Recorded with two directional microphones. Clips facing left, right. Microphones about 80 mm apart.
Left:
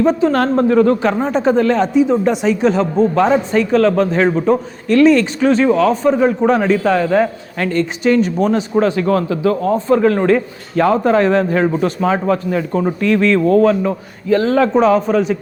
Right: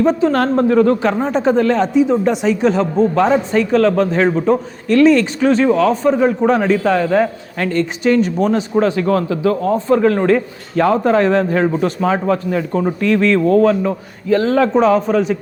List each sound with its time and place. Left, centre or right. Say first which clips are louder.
0.0 s a man's voice: even; left